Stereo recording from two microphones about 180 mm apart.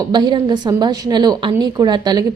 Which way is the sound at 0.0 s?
25° right (ahead or behind).